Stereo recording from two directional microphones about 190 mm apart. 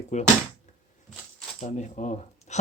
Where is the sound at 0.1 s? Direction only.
40° left (ahead or behind).